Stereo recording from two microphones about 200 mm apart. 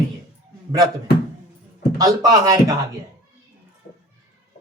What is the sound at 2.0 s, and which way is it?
Speech, 15° right (ahead or behind).